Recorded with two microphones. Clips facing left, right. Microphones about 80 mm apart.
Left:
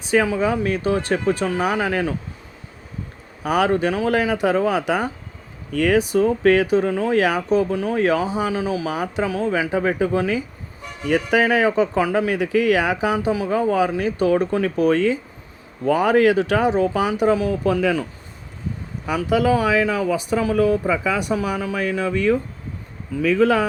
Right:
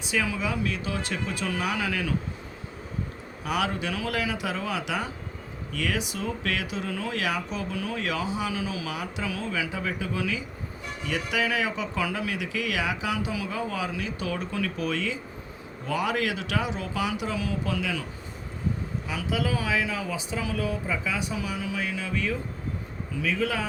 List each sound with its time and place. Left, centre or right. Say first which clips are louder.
0.1 s speech: left 10 dB; left
3.4 s speech: left 10 dB; left
19.0 s speech: left 11 dB; left
20.8 s speech: left 9 dB; left